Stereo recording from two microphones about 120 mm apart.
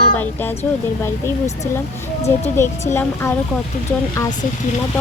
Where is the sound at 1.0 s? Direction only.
25° left (ahead or behind).